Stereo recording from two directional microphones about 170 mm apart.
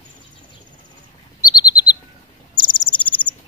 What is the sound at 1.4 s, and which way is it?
Chirp, 25° left (ahead or behind).